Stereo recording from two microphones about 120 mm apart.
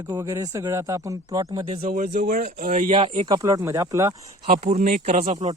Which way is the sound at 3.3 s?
25° right (ahead or behind).